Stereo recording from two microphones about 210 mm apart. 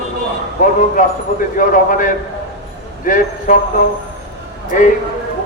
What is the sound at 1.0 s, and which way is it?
Speech, 40° left (ahead or behind).